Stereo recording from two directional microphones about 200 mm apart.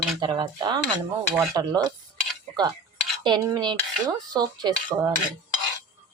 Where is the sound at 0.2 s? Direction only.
20° right (ahead or behind).